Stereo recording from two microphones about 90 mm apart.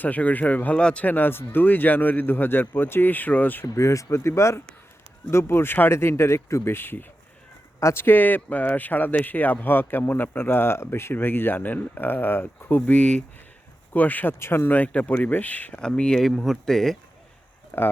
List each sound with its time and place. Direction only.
0.0 s speech: 20° left (ahead or behind)
3.7 s speech: 35° left (ahead or behind); by 17.0 s 5° left (ahead or behind)
17.7 s speech: 25° left (ahead or behind)